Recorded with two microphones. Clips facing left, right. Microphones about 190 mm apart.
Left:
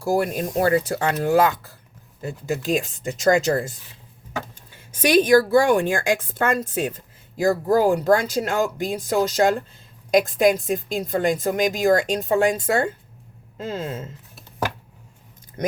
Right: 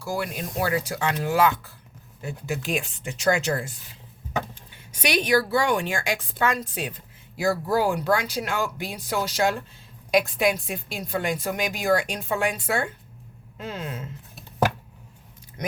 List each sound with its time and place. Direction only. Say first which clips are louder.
0.0 s a woman's voice: left 8 dB; 50° left (ahead or behind)
4.7 s a woman's voice: left 8 dB; 45° left (ahead or behind); by 14.1 s 30° left (ahead or behind)